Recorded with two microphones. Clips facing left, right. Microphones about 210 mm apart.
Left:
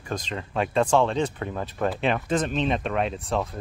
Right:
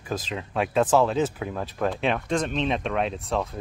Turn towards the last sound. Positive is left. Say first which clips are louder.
# even
turn(degrees=0)  # may be behind; listen again after turning